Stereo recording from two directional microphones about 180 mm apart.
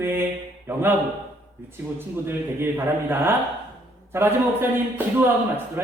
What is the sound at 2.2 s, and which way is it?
A man's voice, 10° right (ahead or behind).